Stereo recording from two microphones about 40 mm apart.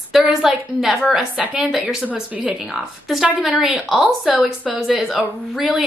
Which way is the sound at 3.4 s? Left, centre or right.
Centre.